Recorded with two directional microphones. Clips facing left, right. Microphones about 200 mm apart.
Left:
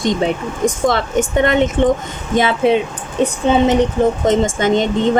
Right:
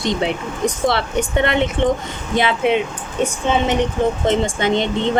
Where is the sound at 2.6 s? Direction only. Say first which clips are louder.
Left 4 dB; 35° left (ahead or behind).